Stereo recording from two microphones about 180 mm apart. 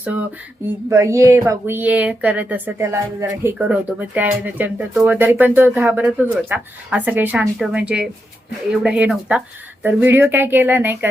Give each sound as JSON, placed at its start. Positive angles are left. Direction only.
{"t": 0.9, "sound": "speech", "side_deg": -15}